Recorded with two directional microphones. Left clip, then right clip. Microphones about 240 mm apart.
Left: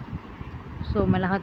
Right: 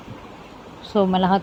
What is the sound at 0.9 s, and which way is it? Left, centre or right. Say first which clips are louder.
Speech: right 7 dB; centre.